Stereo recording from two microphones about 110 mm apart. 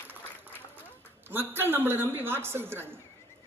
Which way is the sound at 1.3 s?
20° right (ahead or behind).